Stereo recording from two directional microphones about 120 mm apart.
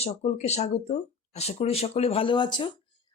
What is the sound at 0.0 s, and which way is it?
Speech, 65° left (ahead or behind).